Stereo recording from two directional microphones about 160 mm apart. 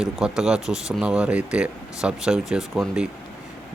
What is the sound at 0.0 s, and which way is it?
Speech, 5° right (ahead or behind).